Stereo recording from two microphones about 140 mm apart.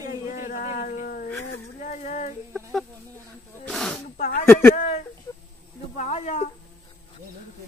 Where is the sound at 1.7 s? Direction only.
65° left (ahead or behind).